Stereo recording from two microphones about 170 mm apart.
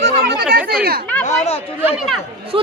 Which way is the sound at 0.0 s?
75° right (ahead or behind).